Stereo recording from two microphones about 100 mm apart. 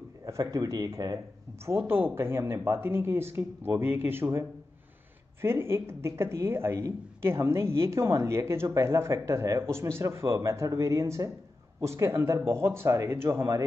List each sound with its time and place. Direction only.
0.2 s a man's voice: 35° right (ahead or behind)